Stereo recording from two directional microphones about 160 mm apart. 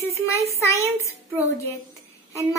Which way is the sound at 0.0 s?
20° left (ahead or behind).